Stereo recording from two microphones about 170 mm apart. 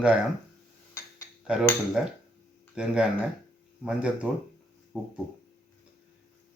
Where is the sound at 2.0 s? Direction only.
5° right (ahead or behind).